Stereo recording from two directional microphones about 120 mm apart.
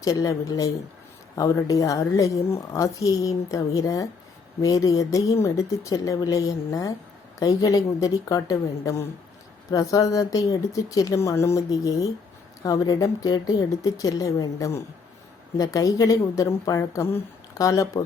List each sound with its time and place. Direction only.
0.0 s a woman's voice: 30° left (ahead or behind)